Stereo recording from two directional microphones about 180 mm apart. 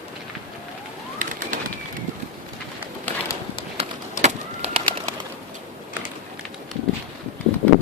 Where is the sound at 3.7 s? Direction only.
35° right (ahead or behind).